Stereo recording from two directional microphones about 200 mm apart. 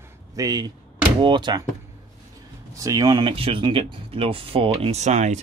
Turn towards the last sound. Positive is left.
turn(degrees=-35)  # may be behind; listen again after turning